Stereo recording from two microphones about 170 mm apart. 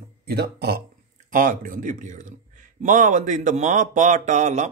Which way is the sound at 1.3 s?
55° right (ahead or behind).